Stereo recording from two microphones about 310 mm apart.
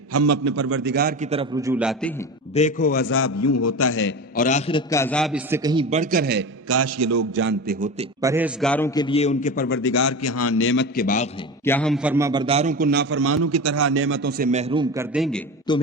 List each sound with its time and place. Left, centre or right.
0.1 s a man's voice: right
0.7 s a man's voice: right; by 2.1 s centre
2.6 s a man's voice: left
3.1 s a man's voice: left
4.4 s a man's voice: left
4.9 s a man's voice: centre; by 6.4 s right
6.7 s a man's voice: right
7.3 s a man's voice: right
8.2 s a man's voice: centre; by 9.7 s left
9.9 s a man's voice: left
11.6 s a man's voice: centre; by 14.0 s right
14.0 s a man's voice: right; by 15.0 s centre
15.1 s a man's voice: centre
15.7 s a man's voice: centre